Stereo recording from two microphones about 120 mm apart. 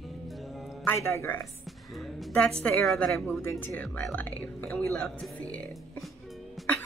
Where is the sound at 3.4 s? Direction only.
20° left (ahead or behind).